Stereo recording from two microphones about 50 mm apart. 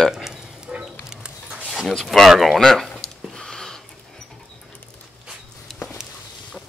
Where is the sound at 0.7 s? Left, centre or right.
Right.